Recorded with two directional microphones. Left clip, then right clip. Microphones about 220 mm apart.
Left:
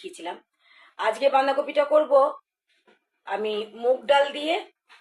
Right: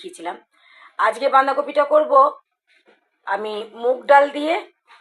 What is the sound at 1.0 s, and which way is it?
Speech, 15° right (ahead or behind).